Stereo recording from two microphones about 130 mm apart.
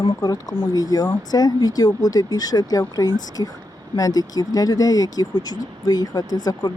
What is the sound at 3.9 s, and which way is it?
Speech, 30° left (ahead or behind).